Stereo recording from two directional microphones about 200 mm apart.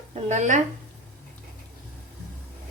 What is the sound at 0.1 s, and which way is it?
Speech, 35° right (ahead or behind).